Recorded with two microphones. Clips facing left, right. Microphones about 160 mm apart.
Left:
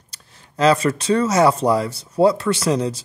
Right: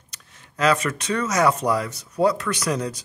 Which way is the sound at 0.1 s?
30° left (ahead or behind).